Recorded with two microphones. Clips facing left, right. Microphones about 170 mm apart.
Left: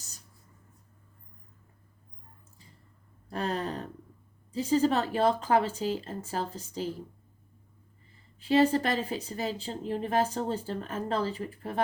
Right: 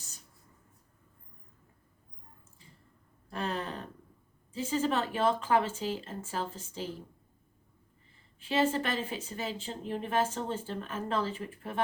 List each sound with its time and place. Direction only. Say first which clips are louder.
3.2 s a sound: left 3 dB; 40° left (ahead or behind)
4.5 s a woman's voice: left 5 dB; 40° left (ahead or behind)
8.4 s a woman's voice: left 5 dB; 40° left (ahead or behind)